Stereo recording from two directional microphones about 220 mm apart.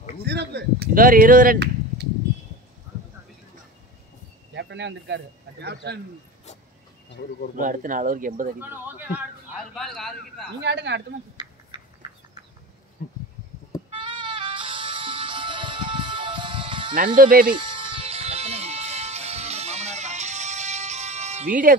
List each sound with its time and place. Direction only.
0.2 s speech: 50° right (ahead or behind)
4.6 s speech: 55° right (ahead or behind)
7.5 s speech: 35° right (ahead or behind)
8.5 s a man's voice: 10° right (ahead or behind)
10.6 s speech: 50° right (ahead or behind)
11.7 s a sound: 20° right (ahead or behind)
13.0 s a sound: 40° left (ahead or behind)
13.8 s music: 20° right (ahead or behind)
16.9 s speech: 40° right (ahead or behind)
17.6 s music: 20° right (ahead or behind); by 21.7 s 40° right (ahead or behind)